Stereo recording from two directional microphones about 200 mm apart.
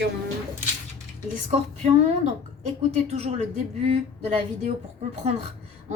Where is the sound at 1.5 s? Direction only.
30° right (ahead or behind).